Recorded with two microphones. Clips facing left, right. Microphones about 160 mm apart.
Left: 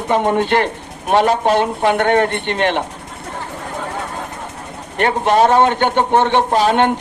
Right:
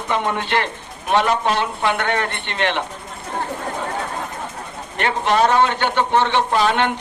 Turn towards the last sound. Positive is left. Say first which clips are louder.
# left 4 dB
turn(degrees=40)  # may be behind; listen again after turning